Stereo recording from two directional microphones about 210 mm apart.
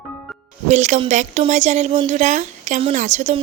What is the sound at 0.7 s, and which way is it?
A woman's voice, 35° right (ahead or behind).